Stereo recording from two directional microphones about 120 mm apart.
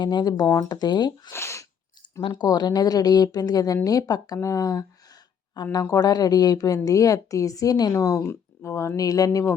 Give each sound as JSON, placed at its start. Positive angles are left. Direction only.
{"t": 0.0, "sound": "speech", "side_deg": 35}
{"t": 1.3, "sound": "a sound", "side_deg": 20}
{"t": 2.2, "sound": "speech", "side_deg": 35}